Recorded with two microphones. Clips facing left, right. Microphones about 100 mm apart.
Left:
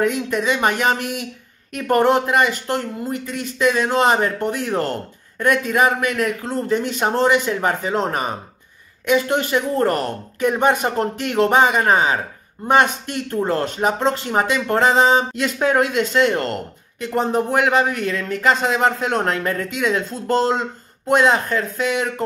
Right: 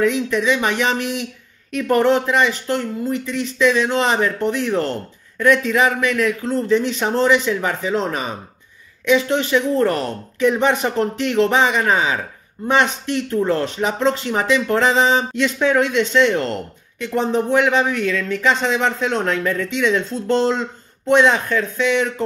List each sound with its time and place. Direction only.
0.0 s speech: 45° left (ahead or behind)